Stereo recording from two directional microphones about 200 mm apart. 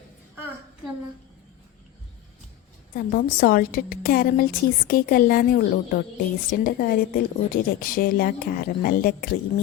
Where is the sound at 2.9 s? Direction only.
45° left (ahead or behind).